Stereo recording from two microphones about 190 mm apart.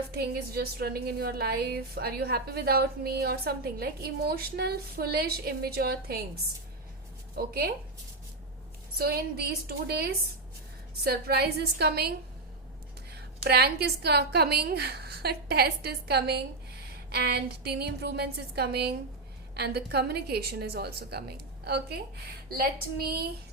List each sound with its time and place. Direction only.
0.1 s a woman's voice: 55° right (ahead or behind)
7.3 s a woman's voice: 50° right (ahead or behind)
9.0 s a woman's voice: 55° right (ahead or behind)
13.4 s a woman's voice: 60° right (ahead or behind)